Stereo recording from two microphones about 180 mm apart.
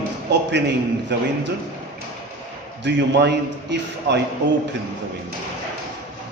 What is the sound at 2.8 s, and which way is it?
A man's voice, 70° right (ahead or behind).